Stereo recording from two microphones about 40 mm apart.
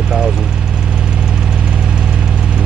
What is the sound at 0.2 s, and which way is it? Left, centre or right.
Vehicle, right.